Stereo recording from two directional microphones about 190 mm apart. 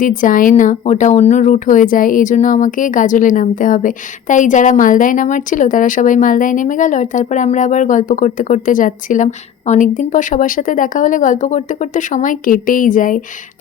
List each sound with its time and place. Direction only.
0.2 s a woman's voice: 45° left (ahead or behind)